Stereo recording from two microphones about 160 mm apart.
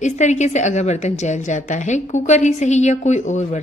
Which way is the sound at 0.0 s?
45° left (ahead or behind).